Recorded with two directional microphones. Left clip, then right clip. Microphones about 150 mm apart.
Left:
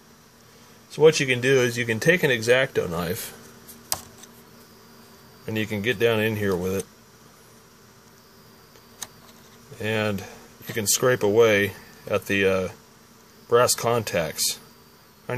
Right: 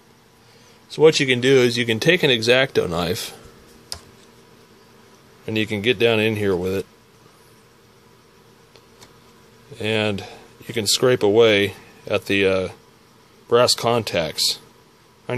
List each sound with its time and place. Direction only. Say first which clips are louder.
0.9 s speech: right 3 dB; 30° right (ahead or behind)
5.4 s speech: right 5 dB; 25° right (ahead or behind)
9.8 s speech: right 4 dB; 25° right (ahead or behind)